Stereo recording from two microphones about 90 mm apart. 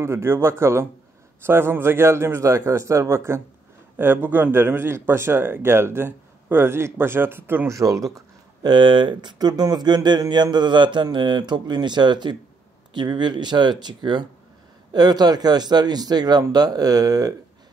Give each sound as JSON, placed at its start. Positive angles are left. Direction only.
{"t": 0.0, "sound": "a man's voice", "side_deg": -25}
{"t": 8.6, "sound": "a man's voice", "side_deg": -60}